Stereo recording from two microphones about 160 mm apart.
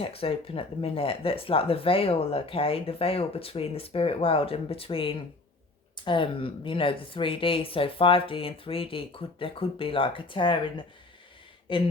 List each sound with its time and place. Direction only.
0.0 s speech: 35° left (ahead or behind)